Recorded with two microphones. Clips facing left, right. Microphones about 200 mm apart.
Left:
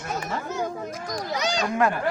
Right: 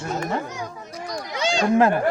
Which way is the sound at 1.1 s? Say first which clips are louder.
Even; 40° left (ahead or behind).